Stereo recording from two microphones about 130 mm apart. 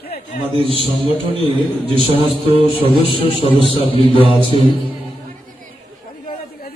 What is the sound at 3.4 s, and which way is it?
A man's voice, 45° left (ahead or behind).